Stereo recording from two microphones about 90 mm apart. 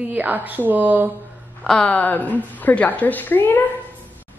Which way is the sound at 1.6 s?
10° left (ahead or behind).